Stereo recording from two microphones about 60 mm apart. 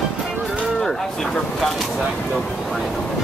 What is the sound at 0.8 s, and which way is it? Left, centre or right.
A man's voice, centre.